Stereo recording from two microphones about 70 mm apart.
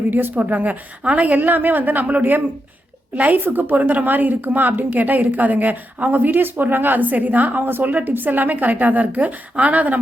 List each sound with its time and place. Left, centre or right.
0.1 s a woman's voice: right